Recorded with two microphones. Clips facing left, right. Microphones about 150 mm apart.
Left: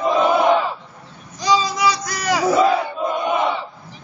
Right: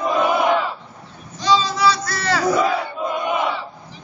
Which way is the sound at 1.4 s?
15° left (ahead or behind).